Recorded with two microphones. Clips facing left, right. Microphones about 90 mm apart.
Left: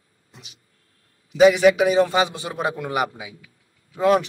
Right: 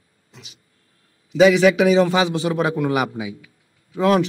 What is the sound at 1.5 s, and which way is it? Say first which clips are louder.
A man's voice: right 2 dB; 90° right.